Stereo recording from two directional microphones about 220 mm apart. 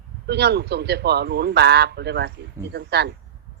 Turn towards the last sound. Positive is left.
turn(degrees=-50)  # may be behind; listen again after turning